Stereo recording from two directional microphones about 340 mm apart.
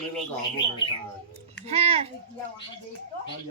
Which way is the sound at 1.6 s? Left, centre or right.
Centre.